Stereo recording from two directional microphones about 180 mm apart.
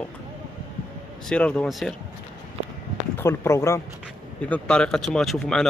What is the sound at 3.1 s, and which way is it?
Speech, 15° left (ahead or behind).